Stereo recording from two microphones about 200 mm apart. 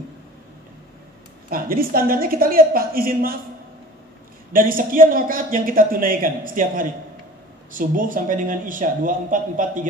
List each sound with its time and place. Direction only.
1.5 s speech: 45° right (ahead or behind)
4.5 s a man's voice: 45° right (ahead or behind)